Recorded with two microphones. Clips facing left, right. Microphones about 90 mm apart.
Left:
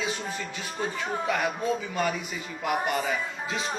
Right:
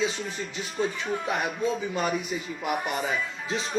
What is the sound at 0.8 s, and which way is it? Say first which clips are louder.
Speech: right 2 dB; 30° left (ahead or behind).